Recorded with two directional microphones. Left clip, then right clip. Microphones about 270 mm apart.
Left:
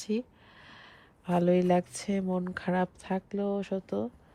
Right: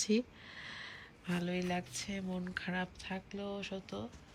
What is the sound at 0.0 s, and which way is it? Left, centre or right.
Speech, centre.